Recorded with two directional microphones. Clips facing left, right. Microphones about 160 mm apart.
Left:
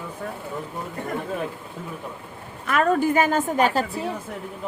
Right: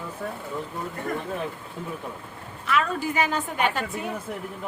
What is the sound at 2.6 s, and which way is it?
A woman's voice, 50° left (ahead or behind).